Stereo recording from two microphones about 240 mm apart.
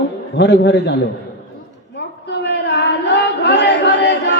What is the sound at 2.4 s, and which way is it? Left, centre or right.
Child singing, left.